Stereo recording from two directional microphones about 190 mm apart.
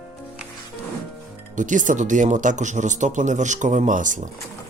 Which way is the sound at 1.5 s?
40° right (ahead or behind).